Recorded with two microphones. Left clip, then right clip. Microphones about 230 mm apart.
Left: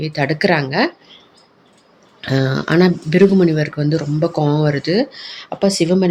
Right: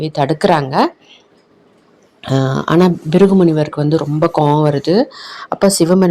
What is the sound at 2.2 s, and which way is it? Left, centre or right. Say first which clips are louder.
Speech: right 2 dB; centre.